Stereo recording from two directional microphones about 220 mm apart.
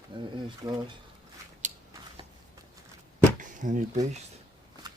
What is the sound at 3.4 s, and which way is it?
Speech, 35° right (ahead or behind).